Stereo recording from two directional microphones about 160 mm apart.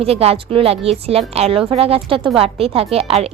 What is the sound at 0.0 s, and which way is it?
Speech, 40° right (ahead or behind).